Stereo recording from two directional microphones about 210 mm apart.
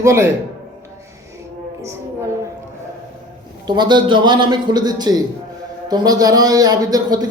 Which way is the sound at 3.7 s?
20° right (ahead or behind).